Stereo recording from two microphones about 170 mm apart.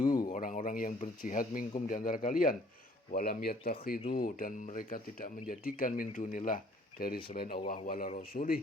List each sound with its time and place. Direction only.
0.3 s speech: 50° left (ahead or behind)